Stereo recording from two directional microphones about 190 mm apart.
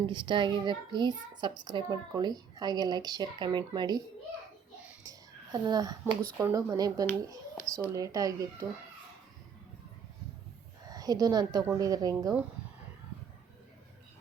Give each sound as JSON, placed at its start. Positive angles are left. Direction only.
{"t": 0.0, "sound": "a child's voice", "side_deg": -25}
{"t": 5.0, "sound": "a child's voice", "side_deg": -20}
{"t": 10.8, "sound": "a woman's voice", "side_deg": -20}